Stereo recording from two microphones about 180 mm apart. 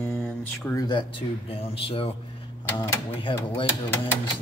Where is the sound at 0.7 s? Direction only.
25° left (ahead or behind).